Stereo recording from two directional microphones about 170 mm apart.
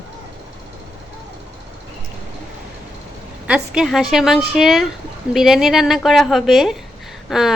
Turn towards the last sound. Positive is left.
turn(degrees=0)  # may be behind; listen again after turning